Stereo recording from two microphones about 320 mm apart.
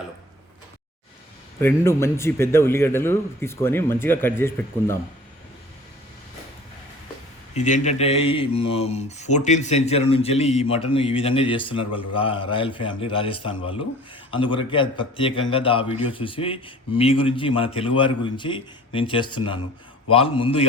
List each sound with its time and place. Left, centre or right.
1.6 s speech: centre
7.5 s speech: left